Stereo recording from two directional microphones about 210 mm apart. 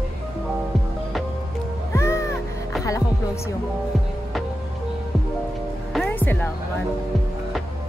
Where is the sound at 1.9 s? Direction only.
15° left (ahead or behind).